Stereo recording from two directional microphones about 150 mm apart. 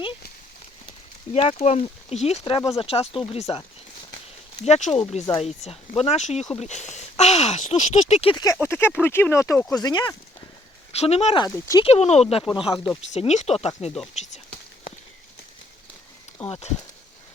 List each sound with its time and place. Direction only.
1.3 s speech: 45° left (ahead or behind)
2.4 s speech: 25° left (ahead or behind)
4.6 s speech: 45° left (ahead or behind)
8.3 s speech: 25° left (ahead or behind)
8.6 s speech: 15° left (ahead or behind)
10.9 s speech: 45° left (ahead or behind)
11.4 s speech: 25° left (ahead or behind)
11.9 s speech: 45° left (ahead or behind)
13.1 s speech: 50° left (ahead or behind)
14.1 s a sound: 50° left (ahead or behind)
16.5 s speech: 45° left (ahead or behind)